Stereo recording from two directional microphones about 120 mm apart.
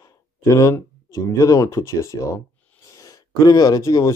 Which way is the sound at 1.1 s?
25° left (ahead or behind).